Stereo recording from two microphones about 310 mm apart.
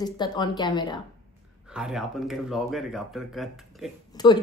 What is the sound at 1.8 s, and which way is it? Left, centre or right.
Speech, centre.